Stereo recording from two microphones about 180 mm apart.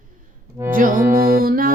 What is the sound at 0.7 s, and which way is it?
Music, 50° right (ahead or behind).